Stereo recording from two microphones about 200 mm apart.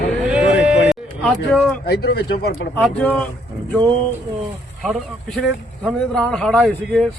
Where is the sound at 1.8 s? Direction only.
55° left (ahead or behind).